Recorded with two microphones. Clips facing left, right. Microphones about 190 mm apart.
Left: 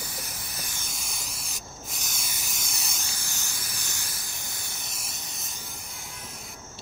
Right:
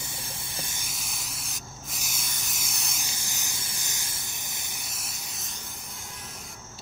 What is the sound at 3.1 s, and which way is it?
Spray, 20° right (ahead or behind).